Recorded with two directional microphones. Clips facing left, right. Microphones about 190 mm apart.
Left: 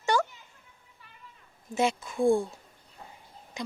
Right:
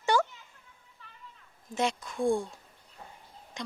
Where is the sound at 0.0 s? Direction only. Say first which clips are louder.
Even; 10° right (ahead or behind).